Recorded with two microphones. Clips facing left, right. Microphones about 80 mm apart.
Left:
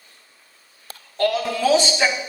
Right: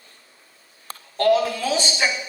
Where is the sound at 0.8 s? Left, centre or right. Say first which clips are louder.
Right 3 dB; right.